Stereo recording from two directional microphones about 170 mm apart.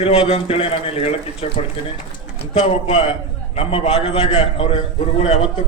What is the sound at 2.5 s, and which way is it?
A man's voice, 35° left (ahead or behind).